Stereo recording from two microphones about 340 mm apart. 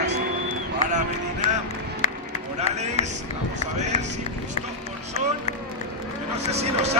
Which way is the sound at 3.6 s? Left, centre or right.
Centre.